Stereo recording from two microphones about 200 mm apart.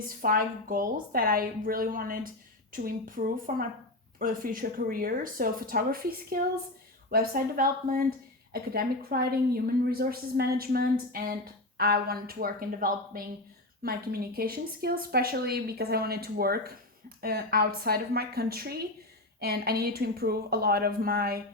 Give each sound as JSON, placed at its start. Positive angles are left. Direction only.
{"t": 0.2, "sound": "a woman's voice", "side_deg": -45}